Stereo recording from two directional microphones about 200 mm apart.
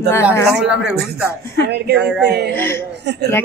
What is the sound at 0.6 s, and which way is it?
Speech, 5° right (ahead or behind).